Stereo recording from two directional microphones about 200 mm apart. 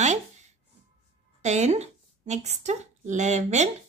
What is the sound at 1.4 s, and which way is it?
Speech, 35° right (ahead or behind).